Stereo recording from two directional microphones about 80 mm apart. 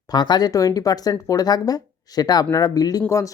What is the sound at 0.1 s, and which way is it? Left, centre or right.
Speech, left.